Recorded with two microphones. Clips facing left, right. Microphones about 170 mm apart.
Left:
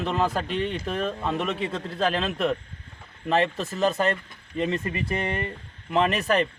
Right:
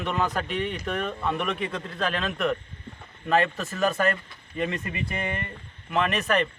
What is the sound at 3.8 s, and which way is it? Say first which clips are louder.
Speech: left 1 dB; 20° left (ahead or behind).